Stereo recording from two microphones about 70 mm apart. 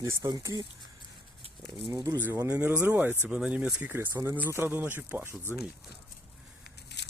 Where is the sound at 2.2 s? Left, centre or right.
Right.